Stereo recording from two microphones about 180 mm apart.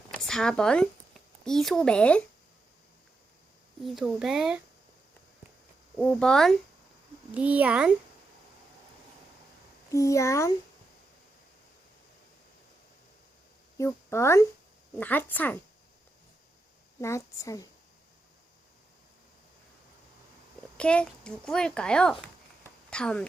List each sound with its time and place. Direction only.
0.3 s speech: 5° left (ahead or behind)
3.8 s a child's voice: centre (ahead or behind)
6.0 s a child's voice: 5° left (ahead or behind)
7.3 s a child's voice: 10° right (ahead or behind)
9.9 s speech: 15° left (ahead or behind)
13.7 s speech: 15° left (ahead or behind)
17.0 s speech: 15° left (ahead or behind)
20.7 s a child's voice: 5° left (ahead or behind)